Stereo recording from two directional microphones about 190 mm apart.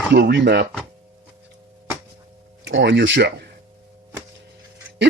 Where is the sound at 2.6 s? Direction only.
70° right (ahead or behind).